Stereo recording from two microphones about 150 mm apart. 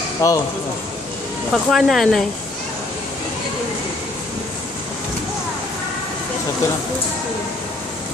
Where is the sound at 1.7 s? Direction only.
Centre (ahead or behind).